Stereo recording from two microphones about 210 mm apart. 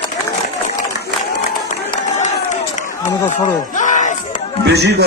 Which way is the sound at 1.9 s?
35° left (ahead or behind).